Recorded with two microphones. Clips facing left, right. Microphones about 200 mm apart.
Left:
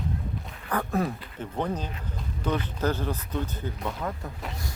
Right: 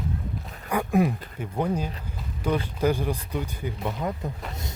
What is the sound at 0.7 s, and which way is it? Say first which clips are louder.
Speech: right 4 dB; 15° right (ahead or behind).